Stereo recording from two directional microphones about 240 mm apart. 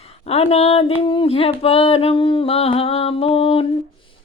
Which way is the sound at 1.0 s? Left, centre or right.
Left.